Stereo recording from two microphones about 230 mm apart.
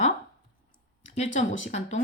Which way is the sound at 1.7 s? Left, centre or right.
Left.